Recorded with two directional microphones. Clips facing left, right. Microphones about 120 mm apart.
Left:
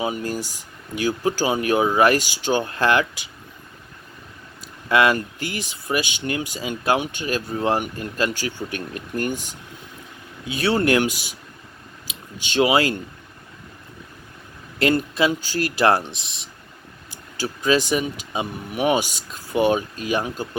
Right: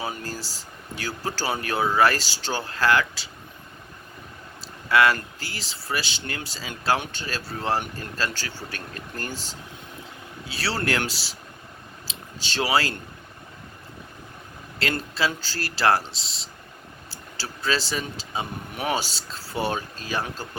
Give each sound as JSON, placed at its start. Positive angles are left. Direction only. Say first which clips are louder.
{"t": 0.0, "sound": "speech", "louder": "left 7 dB", "side_deg": 20}
{"t": 4.9, "sound": "speech", "louder": "left 2 dB", "side_deg": 20}
{"t": 14.8, "sound": "speech", "louder": "left 7 dB", "side_deg": 20}